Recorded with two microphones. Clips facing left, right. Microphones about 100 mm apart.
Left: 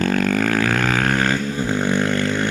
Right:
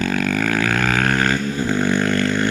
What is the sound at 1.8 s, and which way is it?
Vehicle, 20° left (ahead or behind).